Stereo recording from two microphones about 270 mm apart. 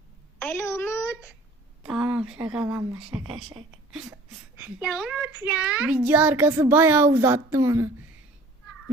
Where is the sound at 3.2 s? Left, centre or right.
Centre.